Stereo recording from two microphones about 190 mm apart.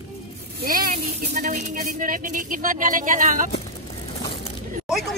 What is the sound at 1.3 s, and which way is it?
A woman's voice, 40° right (ahead or behind).